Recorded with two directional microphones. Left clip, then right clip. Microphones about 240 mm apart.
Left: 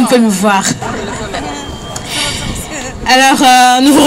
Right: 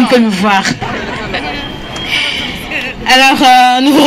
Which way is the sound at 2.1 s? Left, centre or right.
Left.